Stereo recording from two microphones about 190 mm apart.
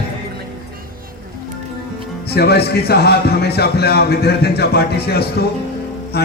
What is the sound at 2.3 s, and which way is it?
Speech, 60° left (ahead or behind).